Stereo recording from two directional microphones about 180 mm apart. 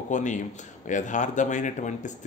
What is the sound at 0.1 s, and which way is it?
A man's voice, 45° left (ahead or behind).